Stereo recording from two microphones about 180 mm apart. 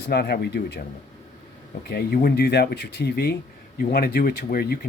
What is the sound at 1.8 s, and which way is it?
Speech, 55° left (ahead or behind).